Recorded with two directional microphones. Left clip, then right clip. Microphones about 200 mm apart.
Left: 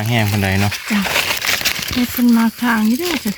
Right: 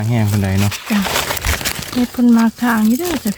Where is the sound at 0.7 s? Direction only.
35° right (ahead or behind).